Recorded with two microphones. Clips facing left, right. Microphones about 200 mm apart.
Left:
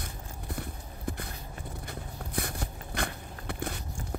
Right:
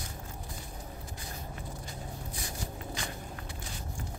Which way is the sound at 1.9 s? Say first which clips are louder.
Left 1 dB; 60° left (ahead or behind).